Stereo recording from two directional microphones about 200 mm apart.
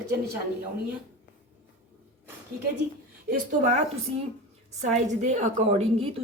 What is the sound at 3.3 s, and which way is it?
A woman's voice, 35° right (ahead or behind).